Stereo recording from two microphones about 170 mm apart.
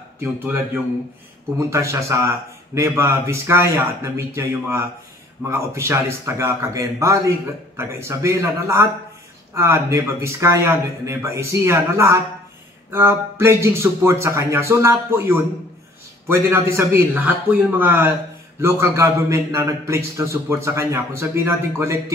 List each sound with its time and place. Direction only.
1.7 s a man's voice: 15° right (ahead or behind)